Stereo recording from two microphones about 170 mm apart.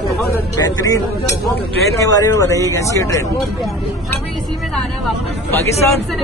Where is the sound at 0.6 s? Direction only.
20° left (ahead or behind).